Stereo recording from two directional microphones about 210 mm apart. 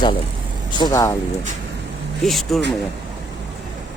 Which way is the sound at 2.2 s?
Centre (ahead or behind).